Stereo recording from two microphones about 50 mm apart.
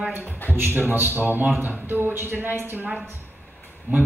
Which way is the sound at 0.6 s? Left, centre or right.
Right.